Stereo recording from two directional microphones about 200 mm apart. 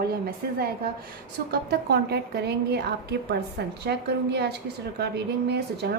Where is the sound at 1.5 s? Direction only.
55° right (ahead or behind).